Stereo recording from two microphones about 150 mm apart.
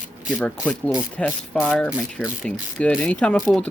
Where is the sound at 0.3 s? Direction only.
Centre (ahead or behind).